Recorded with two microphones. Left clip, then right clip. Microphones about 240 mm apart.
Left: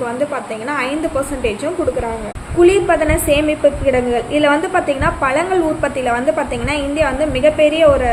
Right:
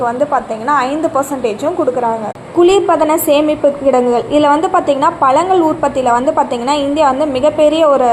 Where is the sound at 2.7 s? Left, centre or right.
Centre.